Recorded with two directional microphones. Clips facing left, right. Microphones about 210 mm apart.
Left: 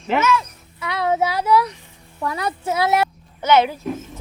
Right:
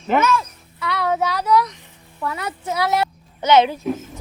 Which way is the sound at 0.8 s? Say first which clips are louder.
Left 1 dB; 20° left (ahead or behind).